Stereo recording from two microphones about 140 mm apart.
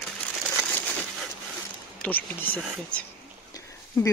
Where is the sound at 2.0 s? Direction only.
10° left (ahead or behind).